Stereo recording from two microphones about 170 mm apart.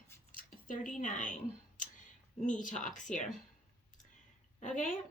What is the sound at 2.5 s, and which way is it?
Speech, 50° left (ahead or behind).